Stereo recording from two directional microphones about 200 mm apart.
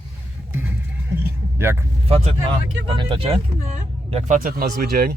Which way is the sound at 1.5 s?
10° right (ahead or behind).